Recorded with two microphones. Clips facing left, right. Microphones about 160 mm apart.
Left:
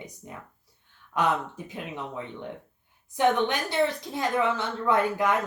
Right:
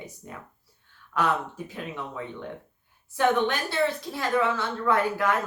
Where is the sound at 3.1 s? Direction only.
20° left (ahead or behind).